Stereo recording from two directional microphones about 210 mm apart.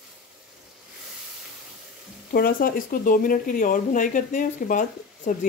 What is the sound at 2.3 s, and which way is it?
Speech, 45° left (ahead or behind).